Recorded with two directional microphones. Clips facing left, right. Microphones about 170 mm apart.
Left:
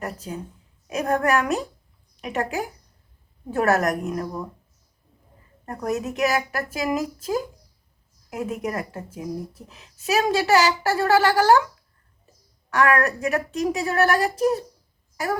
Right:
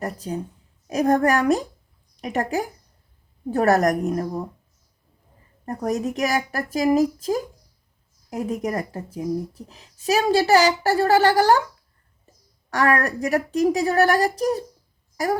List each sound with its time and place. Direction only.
0.0 s a woman's voice: 35° right (ahead or behind)
5.6 s a woman's voice: 35° right (ahead or behind)
8.3 s a woman's voice: 35° right (ahead or behind)
12.7 s a woman's voice: 35° right (ahead or behind)